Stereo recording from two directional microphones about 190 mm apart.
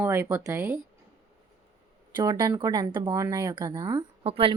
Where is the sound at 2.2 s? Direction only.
20° right (ahead or behind).